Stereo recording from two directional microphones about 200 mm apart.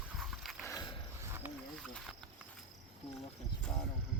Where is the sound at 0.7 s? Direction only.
20° left (ahead or behind).